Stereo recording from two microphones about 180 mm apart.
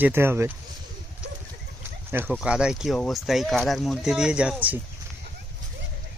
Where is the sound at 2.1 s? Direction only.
10° right (ahead or behind).